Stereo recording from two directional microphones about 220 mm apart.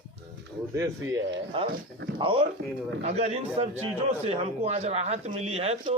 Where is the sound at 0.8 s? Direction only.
15° right (ahead or behind).